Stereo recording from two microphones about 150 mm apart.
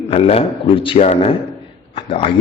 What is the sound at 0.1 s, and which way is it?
A man's voice, 40° left (ahead or behind).